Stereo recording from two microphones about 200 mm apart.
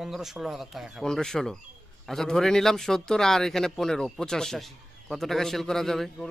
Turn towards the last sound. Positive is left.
turn(degrees=0)  # may be behind; listen again after turning